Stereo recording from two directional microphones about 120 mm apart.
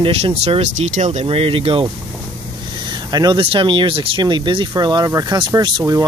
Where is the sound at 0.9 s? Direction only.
75° right (ahead or behind); by 1.8 s 50° right (ahead or behind).